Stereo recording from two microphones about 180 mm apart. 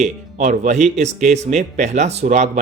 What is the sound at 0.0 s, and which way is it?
Speech, 45° right (ahead or behind).